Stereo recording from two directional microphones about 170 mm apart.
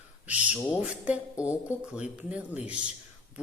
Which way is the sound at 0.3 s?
10° right (ahead or behind).